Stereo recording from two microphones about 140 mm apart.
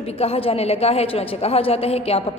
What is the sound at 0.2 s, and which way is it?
A woman's voice, 45° left (ahead or behind).